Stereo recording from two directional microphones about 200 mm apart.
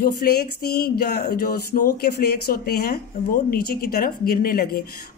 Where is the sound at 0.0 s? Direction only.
50° left (ahead or behind).